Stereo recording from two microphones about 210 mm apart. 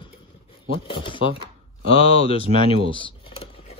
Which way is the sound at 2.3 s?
30° left (ahead or behind).